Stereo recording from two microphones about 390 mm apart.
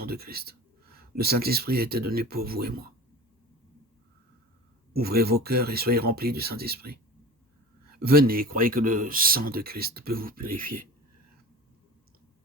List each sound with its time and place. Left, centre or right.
0.0 s speech: right
4.9 s speech: right